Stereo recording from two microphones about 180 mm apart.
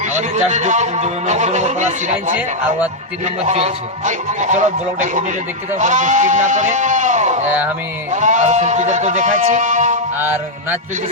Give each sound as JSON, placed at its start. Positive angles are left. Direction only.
{"t": 0.0, "sound": "speech", "side_deg": -40}
{"t": 10.2, "sound": "music", "side_deg": -10}